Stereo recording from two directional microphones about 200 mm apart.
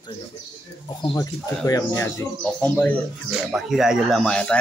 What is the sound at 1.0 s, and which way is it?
Speech, 15° left (ahead or behind).